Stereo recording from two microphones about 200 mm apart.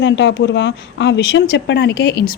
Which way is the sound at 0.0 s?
65° left (ahead or behind).